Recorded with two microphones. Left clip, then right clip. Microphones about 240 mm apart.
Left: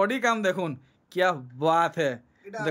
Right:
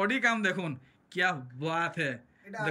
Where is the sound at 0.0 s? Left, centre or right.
Centre.